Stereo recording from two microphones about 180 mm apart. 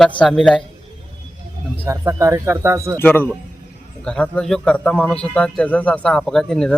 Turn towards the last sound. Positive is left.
turn(degrees=5)  # may be behind; listen again after turning